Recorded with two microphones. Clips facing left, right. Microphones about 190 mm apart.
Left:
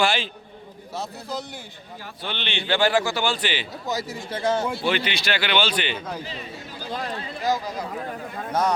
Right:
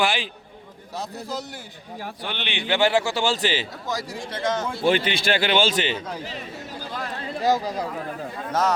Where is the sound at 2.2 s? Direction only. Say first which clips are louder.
Left 2 dB; 15° right (ahead or behind); by 3.6 s 30° right (ahead or behind).